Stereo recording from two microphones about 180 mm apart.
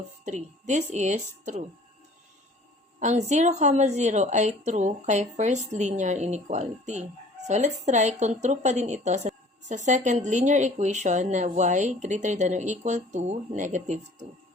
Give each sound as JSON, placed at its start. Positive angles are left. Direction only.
{"t": 0.7, "sound": "a woman's voice", "side_deg": -40}
{"t": 3.0, "sound": "a woman's voice", "side_deg": -40}